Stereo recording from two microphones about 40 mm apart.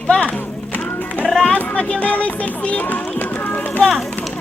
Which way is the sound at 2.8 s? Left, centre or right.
Left.